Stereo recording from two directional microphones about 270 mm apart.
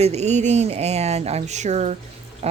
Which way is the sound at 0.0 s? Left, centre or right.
Right.